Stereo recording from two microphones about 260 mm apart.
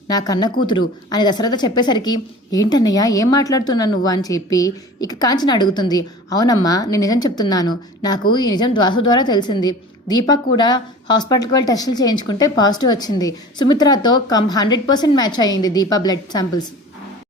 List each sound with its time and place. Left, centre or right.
0.1 s a woman's voice: centre